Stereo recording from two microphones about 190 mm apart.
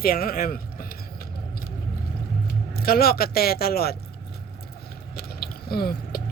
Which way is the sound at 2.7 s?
55° left (ahead or behind).